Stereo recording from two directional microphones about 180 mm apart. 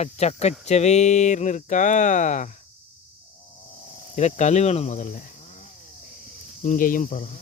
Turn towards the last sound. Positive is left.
turn(degrees=50)  # may be behind; listen again after turning